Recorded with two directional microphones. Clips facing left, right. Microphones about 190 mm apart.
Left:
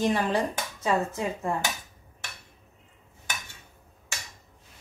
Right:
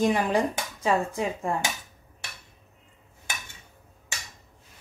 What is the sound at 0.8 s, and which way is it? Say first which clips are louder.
Speech: right 1 dB; 10° right (ahead or behind).